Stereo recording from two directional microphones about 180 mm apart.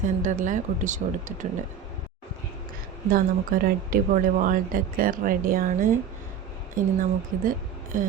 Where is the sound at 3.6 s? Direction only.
50° right (ahead or behind).